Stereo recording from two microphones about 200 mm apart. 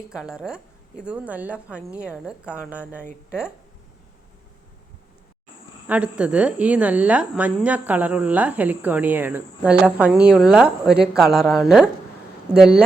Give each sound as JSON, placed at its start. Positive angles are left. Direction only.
{"t": 0.1, "sound": "a woman's voice", "side_deg": -5}
{"t": 5.9, "sound": "a woman's voice", "side_deg": -5}